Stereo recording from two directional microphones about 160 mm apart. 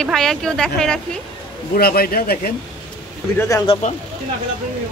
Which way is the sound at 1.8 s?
75° left (ahead or behind).